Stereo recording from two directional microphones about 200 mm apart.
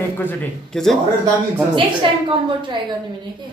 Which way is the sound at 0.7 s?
Centre (ahead or behind).